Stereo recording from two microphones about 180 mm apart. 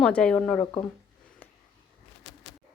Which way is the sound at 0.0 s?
5° left (ahead or behind).